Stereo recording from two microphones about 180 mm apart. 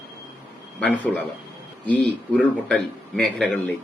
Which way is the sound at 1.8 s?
10° left (ahead or behind).